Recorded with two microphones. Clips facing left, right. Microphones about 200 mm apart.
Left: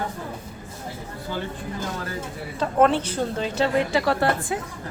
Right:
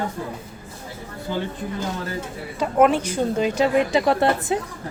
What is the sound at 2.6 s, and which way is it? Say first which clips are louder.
A man's voice: right 2 dB; 10° right (ahead or behind).